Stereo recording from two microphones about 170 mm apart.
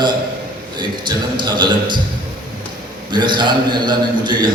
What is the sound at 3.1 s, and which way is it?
A man's voice, 25° right (ahead or behind).